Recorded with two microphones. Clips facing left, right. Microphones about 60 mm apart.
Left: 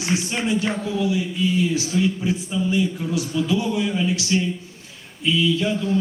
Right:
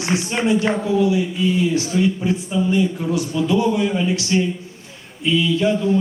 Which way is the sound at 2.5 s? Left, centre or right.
Centre.